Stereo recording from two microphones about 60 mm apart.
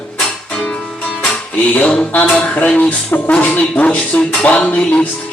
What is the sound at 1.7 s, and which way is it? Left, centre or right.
Speech, left.